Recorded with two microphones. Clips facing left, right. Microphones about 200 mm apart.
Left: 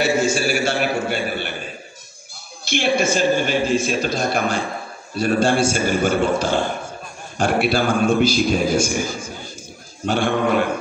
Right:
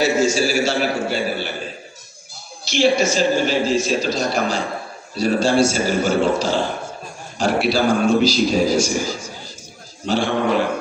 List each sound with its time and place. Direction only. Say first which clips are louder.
0.0 s a man's voice: right 2 dB; 55° left (ahead or behind)
2.6 s a man's voice: right 3 dB; 55° left (ahead or behind)